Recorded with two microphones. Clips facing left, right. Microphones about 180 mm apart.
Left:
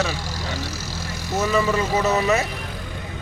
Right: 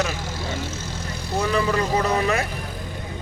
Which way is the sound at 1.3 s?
5° left (ahead or behind).